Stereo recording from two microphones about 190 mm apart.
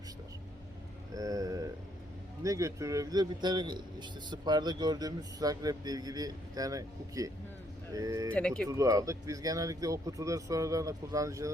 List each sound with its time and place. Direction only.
1.1 s a sound: 20° right (ahead or behind)
2.4 s speech: 15° right (ahead or behind)
8.3 s speech: 5° left (ahead or behind)
8.6 s speech: 15° right (ahead or behind)